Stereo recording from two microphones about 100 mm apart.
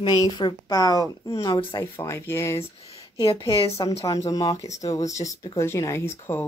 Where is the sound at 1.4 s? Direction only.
45° left (ahead or behind).